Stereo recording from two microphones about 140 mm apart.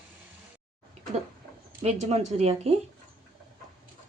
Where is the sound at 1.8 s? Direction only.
50° right (ahead or behind).